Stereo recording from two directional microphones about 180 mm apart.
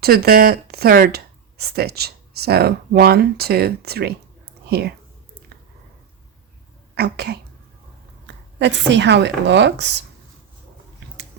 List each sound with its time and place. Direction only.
0.0 s speech: 60° right (ahead or behind)
6.9 s speech: 65° right (ahead or behind)
8.5 s a woman's voice: 80° right